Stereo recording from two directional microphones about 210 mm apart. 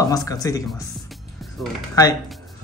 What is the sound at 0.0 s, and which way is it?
Speech, 15° left (ahead or behind).